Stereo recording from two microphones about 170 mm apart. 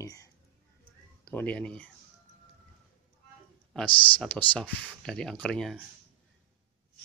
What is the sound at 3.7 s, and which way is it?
Speech, 10° left (ahead or behind).